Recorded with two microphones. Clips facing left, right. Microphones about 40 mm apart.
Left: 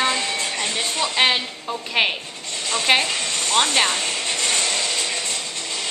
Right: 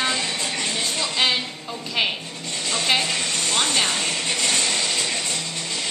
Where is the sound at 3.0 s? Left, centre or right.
Centre.